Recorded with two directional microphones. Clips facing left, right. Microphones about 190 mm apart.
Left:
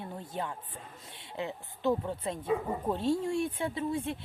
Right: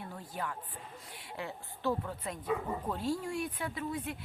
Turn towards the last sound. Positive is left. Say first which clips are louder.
# left 5 dB
turn(degrees=25)  # may be behind; listen again after turning